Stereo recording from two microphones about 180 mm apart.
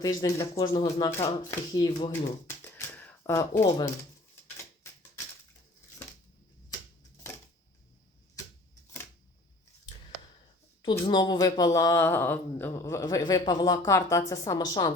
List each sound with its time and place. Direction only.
0.0 s speech: 20° left (ahead or behind)
1.1 s speech: 15° left (ahead or behind)
1.9 s speech: 35° left (ahead or behind)
2.5 s shuffling cards: 15° left (ahead or behind)
4.5 s a sound: 15° left (ahead or behind)
11.0 s speech: 25° left (ahead or behind)